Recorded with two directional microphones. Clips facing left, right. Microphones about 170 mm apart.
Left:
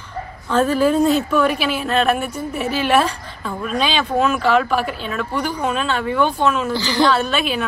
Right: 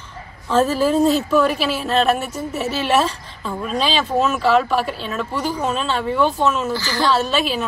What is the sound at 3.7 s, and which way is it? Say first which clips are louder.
Speech: even; 35° right (ahead or behind).